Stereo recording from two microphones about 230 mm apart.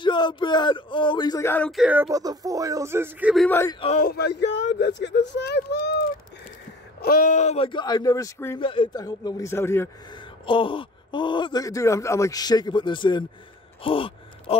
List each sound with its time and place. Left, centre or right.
0.0 s speech: centre
3.4 s a man's voice: centre
3.8 s speech: left
7.0 s a man's voice: left; by 10.2 s centre
10.4 s speech: left
13.8 s gasp: left